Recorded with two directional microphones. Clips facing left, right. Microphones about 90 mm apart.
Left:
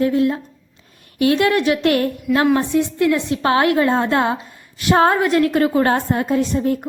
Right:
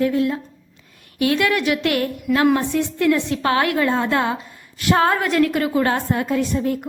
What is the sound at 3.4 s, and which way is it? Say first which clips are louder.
A woman's voice: left 4 dB; 30° left (ahead or behind).